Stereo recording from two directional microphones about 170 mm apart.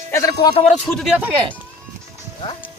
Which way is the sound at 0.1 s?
20° left (ahead or behind).